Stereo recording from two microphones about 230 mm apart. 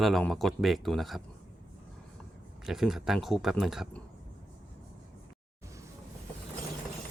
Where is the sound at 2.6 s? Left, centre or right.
Centre.